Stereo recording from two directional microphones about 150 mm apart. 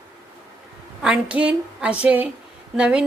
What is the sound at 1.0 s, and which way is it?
A woman's voice, 5° right (ahead or behind).